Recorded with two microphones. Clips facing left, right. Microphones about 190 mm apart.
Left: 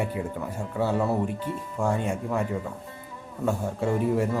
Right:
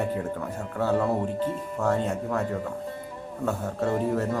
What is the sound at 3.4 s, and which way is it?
Speech, 10° left (ahead or behind).